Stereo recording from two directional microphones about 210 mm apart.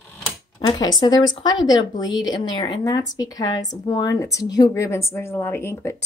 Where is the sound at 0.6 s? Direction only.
20° left (ahead or behind).